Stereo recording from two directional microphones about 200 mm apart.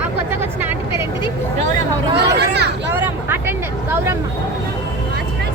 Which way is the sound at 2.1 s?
55° right (ahead or behind).